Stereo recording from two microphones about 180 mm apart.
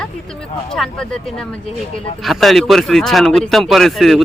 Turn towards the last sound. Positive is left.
turn(degrees=0)  # may be behind; listen again after turning